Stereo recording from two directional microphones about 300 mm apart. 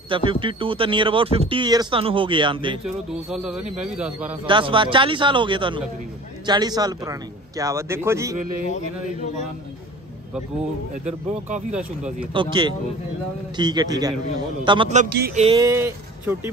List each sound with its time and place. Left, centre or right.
0.1 s speech: centre
3.3 s speech: centre
4.5 s speech: centre
11.7 s speech: centre
12.4 s a man's voice: centre
15.4 s speech: centre